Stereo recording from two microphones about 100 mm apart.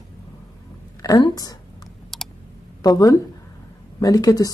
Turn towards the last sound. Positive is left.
turn(degrees=35)  # may be behind; listen again after turning